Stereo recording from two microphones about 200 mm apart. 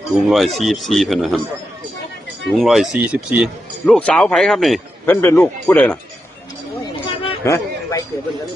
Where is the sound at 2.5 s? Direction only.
Centre (ahead or behind).